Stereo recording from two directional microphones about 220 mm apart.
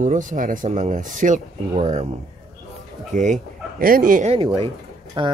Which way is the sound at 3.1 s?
35° right (ahead or behind).